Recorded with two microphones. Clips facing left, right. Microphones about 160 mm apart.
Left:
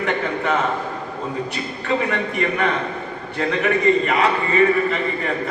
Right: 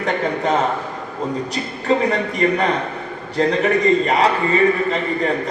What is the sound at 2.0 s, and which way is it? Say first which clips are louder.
A man's voice: right 4 dB; 35° right (ahead or behind).